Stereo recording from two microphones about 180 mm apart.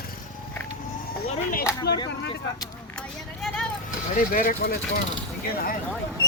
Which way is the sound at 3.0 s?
5° left (ahead or behind).